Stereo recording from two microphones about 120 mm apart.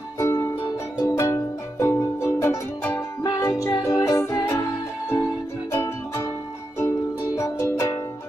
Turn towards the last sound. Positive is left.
turn(degrees=25)  # may be behind; listen again after turning